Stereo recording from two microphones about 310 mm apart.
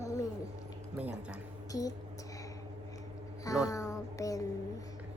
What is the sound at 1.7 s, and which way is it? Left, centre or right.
Speech, centre.